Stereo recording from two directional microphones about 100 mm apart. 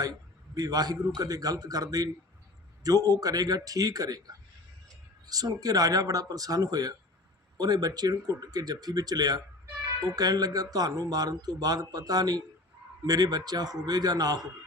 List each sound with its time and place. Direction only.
0.0 s speech: 40° right (ahead or behind)